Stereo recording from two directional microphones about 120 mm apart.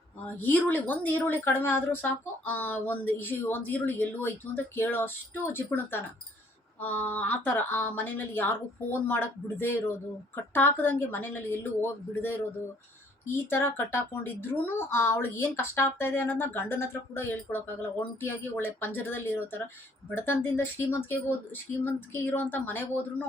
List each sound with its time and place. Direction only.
0.3 s a woman's voice: 15° left (ahead or behind)